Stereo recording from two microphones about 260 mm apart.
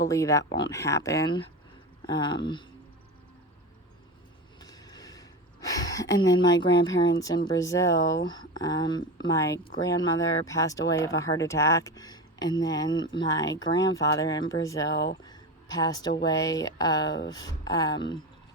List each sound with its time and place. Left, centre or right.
0.1 s speech: centre
4.6 s speech: centre
15.2 s a sound: centre
16.2 s speech: centre